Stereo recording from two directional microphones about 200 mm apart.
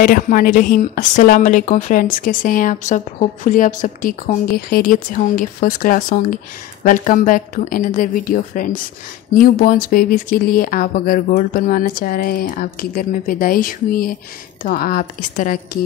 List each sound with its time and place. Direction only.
0.0 s speech: 45° left (ahead or behind)